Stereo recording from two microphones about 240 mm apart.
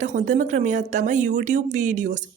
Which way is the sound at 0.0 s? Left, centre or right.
Right.